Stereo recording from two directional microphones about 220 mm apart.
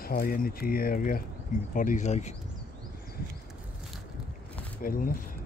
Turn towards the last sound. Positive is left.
turn(degrees=40)  # may be behind; listen again after turning